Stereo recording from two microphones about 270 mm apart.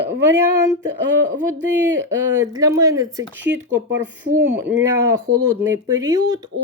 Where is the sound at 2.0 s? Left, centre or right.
Centre.